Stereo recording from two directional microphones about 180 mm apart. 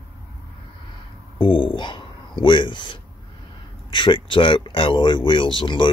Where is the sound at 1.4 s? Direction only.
30° left (ahead or behind).